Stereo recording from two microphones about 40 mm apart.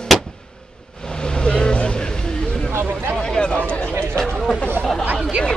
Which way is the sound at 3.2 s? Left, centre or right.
Left.